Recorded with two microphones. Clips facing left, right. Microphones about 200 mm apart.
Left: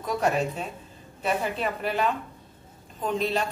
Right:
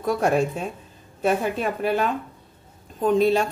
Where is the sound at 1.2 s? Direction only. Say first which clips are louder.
Right 5 dB; 45° right (ahead or behind).